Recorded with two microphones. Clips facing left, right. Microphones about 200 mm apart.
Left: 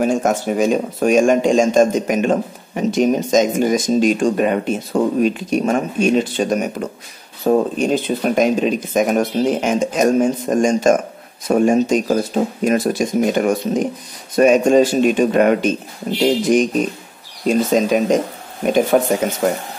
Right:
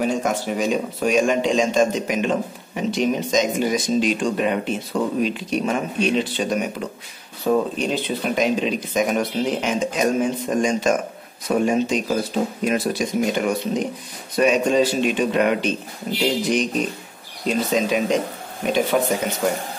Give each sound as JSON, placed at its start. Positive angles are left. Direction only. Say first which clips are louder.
{"t": 0.0, "sound": "speech", "louder": "left 5 dB", "side_deg": 50}
{"t": 19.4, "sound": "speech", "louder": "left 3 dB", "side_deg": 55}